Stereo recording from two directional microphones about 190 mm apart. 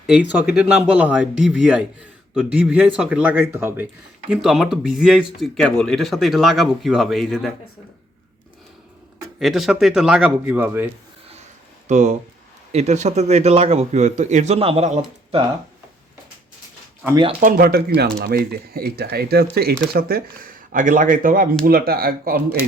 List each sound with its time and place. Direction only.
0.1 s speech: 5° right (ahead or behind)
9.4 s speech: centre (ahead or behind)
11.9 s a man's voice: 40° right (ahead or behind)
17.4 s speech: 55° right (ahead or behind)